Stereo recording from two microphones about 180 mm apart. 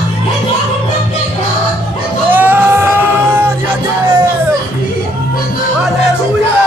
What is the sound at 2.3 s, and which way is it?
Music, 10° right (ahead or behind).